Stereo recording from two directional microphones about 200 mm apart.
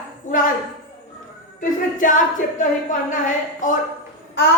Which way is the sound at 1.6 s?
40° left (ahead or behind).